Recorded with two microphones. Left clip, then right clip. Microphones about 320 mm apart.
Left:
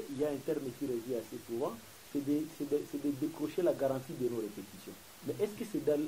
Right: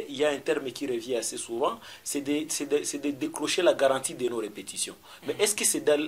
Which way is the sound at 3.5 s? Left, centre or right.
Centre.